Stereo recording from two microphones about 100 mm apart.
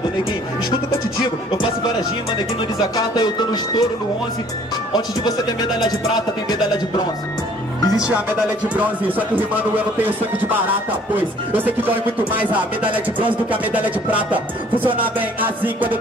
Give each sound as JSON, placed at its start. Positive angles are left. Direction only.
{"t": 3.2, "sound": "speech", "side_deg": 45}
{"t": 7.8, "sound": "speech", "side_deg": 40}
{"t": 8.1, "sound": "speech", "side_deg": -15}
{"t": 10.0, "sound": "music", "side_deg": -20}
{"t": 11.5, "sound": "speech", "side_deg": -15}